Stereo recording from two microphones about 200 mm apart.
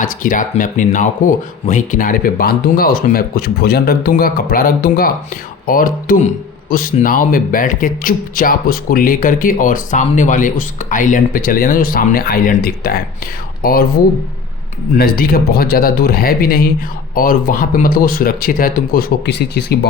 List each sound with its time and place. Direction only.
0.0 s speech: 40° left (ahead or behind)
14.9 s speech: 50° left (ahead or behind)